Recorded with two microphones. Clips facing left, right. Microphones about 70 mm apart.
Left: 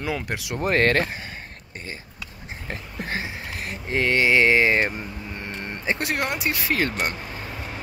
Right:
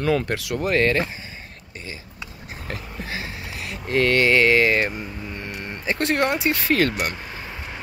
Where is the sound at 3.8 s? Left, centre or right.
Centre.